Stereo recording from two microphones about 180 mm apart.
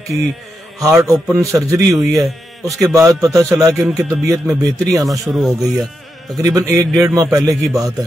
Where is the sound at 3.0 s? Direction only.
20° right (ahead or behind).